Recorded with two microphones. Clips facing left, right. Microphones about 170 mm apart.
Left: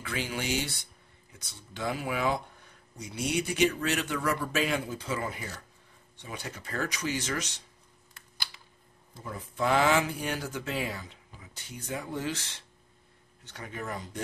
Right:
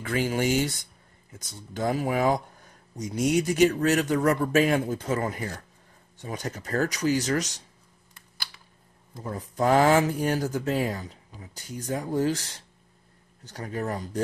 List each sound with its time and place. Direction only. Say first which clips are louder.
0.0 s speech: right 8 dB; 45° right (ahead or behind)
9.1 s speech: right 6 dB; 40° right (ahead or behind)